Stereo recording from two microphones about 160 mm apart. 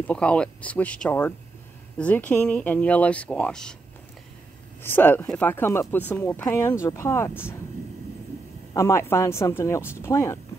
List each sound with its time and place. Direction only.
0.0 s speech: 5° left (ahead or behind)
4.8 s speech: 10° left (ahead or behind)
8.7 s speech: 20° left (ahead or behind)